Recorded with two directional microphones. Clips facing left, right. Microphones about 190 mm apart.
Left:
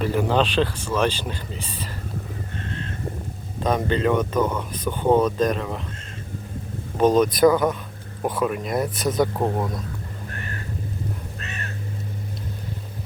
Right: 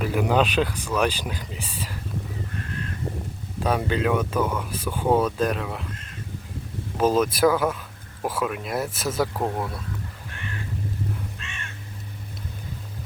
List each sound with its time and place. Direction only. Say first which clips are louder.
0.0 s speech: left 1 dB; 10° right (ahead or behind)
2.6 s a sound: left 2 dB; 30° left (ahead or behind)
3.6 s speech: left 2 dB; 10° right (ahead or behind)
6.9 s speech: left 3 dB; 5° right (ahead or behind)
9.4 s speech: left 3 dB; 20° left (ahead or behind)
11.3 s crow: left 5 dB; 40° left (ahead or behind)